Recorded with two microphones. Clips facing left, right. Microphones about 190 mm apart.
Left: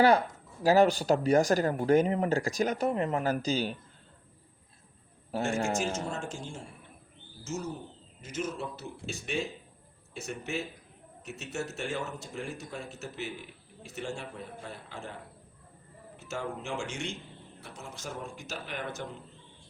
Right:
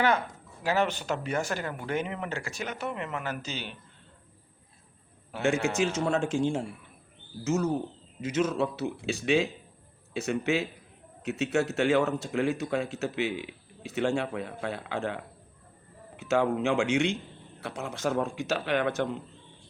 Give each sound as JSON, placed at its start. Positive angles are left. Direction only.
{"t": 0.6, "sound": "speech", "side_deg": 35}
{"t": 5.6, "sound": "speech", "side_deg": -75}
{"t": 8.2, "sound": "speech", "side_deg": -90}